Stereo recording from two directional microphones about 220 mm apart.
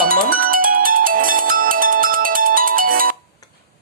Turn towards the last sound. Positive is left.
turn(degrees=-40)  # may be behind; listen again after turning